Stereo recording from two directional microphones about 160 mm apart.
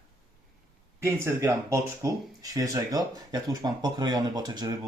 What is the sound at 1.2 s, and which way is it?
Speech, 15° right (ahead or behind).